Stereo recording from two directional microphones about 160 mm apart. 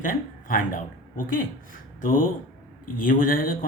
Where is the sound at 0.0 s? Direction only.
55° left (ahead or behind).